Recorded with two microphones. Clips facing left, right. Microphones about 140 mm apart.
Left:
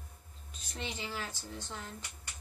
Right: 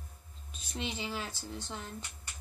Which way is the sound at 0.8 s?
20° right (ahead or behind).